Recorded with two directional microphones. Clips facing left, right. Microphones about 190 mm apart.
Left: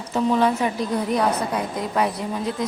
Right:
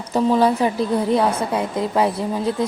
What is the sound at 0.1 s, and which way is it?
Speech, 35° right (ahead or behind).